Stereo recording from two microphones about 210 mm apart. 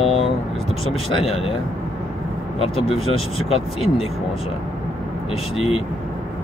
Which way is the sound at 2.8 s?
25° left (ahead or behind).